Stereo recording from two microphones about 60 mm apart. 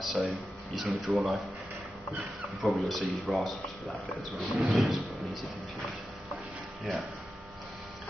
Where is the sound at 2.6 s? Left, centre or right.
Centre.